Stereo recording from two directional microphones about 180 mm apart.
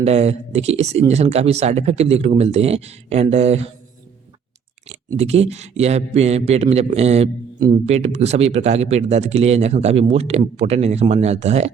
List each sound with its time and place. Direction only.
0.0 s speech: 35° right (ahead or behind)
5.1 s speech: 35° right (ahead or behind)